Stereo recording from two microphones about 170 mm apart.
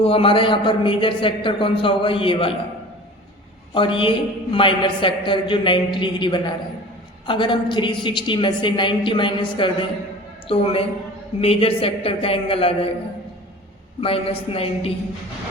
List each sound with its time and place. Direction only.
0.0 s a man's voice: 35° left (ahead or behind)
3.8 s a man's voice: 30° left (ahead or behind)
14.0 s a man's voice: 35° left (ahead or behind)